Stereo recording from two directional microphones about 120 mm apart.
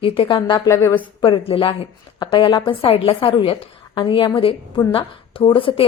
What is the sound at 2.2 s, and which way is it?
A woman's voice, 40° left (ahead or behind).